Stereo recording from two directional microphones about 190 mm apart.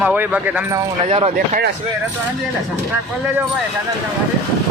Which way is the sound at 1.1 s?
30° right (ahead or behind).